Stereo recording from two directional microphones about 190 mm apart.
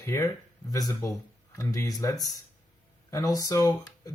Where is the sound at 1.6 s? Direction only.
20° left (ahead or behind).